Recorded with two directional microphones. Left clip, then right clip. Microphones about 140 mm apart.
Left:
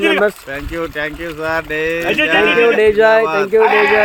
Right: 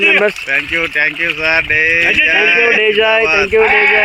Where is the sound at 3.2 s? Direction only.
30° left (ahead or behind).